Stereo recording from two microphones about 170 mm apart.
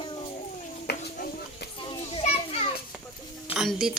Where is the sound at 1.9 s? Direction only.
35° left (ahead or behind).